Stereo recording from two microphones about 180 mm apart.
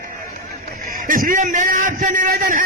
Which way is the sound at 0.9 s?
50° right (ahead or behind).